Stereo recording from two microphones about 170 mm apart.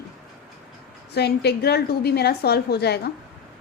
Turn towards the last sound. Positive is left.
turn(degrees=75)  # may be behind; listen again after turning